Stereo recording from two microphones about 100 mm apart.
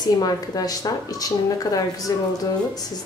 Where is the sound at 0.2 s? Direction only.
40° left (ahead or behind).